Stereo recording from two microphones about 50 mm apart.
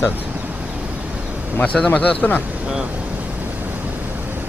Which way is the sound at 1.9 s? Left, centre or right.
Left.